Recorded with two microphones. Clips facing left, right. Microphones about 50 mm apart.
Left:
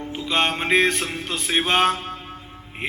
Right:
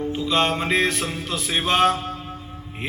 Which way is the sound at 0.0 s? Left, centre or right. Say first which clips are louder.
Right 1 dB; left.